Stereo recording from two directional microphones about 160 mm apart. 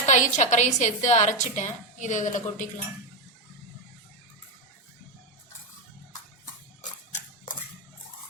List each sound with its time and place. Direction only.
0.0 s a woman's voice: 50° left (ahead or behind)